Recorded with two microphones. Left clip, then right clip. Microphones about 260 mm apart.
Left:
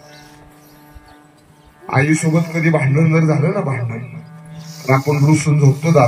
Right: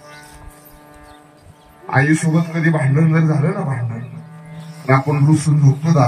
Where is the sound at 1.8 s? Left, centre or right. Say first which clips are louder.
Even; left.